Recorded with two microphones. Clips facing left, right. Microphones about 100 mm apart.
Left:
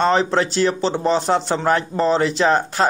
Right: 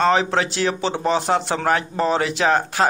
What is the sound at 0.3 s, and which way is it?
Speech, 35° left (ahead or behind).